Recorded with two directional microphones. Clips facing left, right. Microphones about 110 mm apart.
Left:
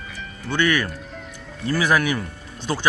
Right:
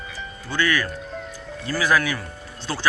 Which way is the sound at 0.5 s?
25° left (ahead or behind).